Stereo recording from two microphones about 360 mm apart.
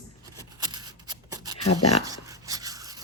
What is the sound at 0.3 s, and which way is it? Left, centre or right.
Scissors, centre.